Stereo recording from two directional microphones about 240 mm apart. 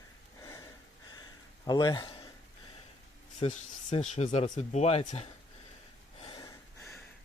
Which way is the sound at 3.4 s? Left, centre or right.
Left.